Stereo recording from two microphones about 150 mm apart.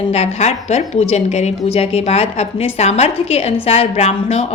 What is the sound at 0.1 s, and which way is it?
A woman's voice, 45° left (ahead or behind).